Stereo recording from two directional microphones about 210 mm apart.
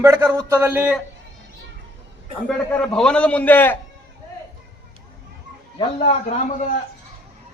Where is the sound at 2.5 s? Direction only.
5° left (ahead or behind).